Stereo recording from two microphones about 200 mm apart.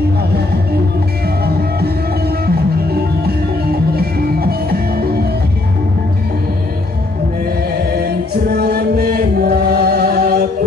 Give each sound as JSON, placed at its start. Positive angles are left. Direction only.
{"t": 2.4, "sound": "music", "side_deg": -50}
{"t": 8.5, "sound": "music", "side_deg": -50}